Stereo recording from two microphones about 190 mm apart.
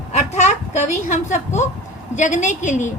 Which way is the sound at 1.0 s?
40° left (ahead or behind).